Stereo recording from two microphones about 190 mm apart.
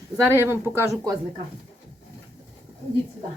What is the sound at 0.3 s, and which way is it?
Speech, 10° right (ahead or behind).